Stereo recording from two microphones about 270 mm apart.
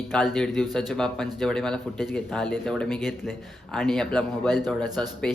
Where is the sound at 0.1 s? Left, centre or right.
Centre.